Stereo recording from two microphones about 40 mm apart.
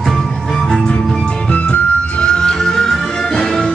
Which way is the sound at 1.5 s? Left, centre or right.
Left.